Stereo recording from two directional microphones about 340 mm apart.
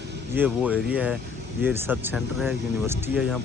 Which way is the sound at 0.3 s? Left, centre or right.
Centre.